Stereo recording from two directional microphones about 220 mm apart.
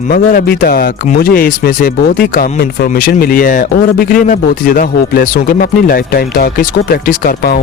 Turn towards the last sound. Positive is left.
turn(degrees=40)  # may be behind; listen again after turning